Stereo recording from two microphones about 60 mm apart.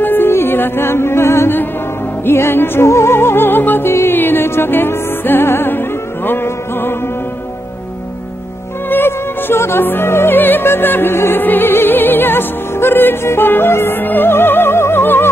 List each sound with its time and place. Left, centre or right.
0.0 s music: left
8.8 s music: left